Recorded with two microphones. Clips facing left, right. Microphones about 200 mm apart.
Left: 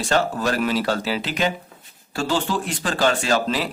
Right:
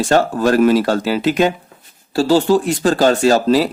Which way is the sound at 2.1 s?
35° right (ahead or behind).